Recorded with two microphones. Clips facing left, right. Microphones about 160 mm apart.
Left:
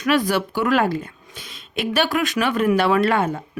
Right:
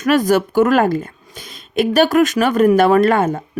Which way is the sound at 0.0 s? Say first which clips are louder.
Right 5 dB; 45° right (ahead or behind).